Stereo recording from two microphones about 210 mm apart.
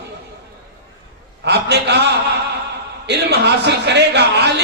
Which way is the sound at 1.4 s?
55° right (ahead or behind).